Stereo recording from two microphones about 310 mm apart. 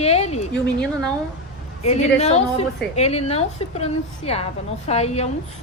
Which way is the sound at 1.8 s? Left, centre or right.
Left.